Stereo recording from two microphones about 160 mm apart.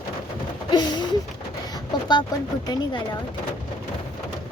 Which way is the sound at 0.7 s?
25° left (ahead or behind).